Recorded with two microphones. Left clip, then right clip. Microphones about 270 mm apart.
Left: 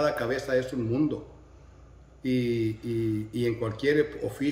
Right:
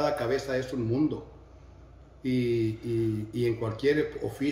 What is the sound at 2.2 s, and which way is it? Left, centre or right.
Speech, centre.